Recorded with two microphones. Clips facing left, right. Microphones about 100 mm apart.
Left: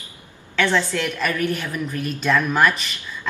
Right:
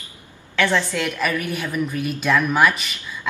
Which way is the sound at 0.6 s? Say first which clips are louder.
Even; 5° right (ahead or behind).